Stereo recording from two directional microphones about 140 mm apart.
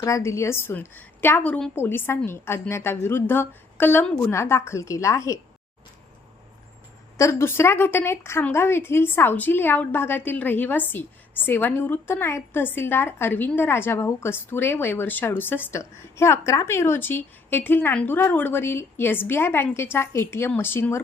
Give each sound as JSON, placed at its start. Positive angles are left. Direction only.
{"t": 0.0, "sound": "a woman's voice", "side_deg": 20}
{"t": 7.2, "sound": "a woman's voice", "side_deg": 20}